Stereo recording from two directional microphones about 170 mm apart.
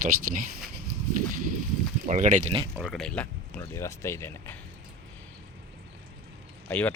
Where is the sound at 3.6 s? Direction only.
15° left (ahead or behind).